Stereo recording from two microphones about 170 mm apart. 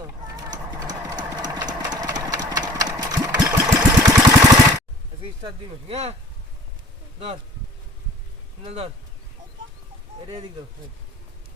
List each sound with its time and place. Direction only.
0.0 s a sound: 20° right (ahead or behind)
0.7 s engine: 25° right (ahead or behind)
3.3 s sewing machine: 15° right (ahead or behind)
5.2 s speech: 35° right (ahead or behind)
8.6 s speech: 35° right (ahead or behind)
10.2 s speech: 35° right (ahead or behind)